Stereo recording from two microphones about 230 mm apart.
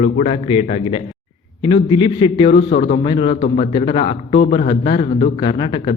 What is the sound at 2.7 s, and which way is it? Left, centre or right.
Speech, left.